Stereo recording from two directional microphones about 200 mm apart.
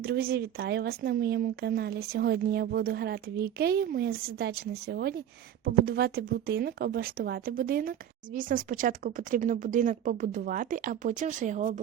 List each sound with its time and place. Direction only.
0.0 s a woman's voice: 50° right (ahead or behind)